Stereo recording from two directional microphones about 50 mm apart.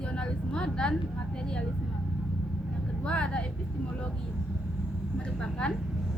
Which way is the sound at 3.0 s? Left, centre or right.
Left.